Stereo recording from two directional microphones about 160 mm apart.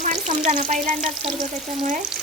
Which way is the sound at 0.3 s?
45° right (ahead or behind).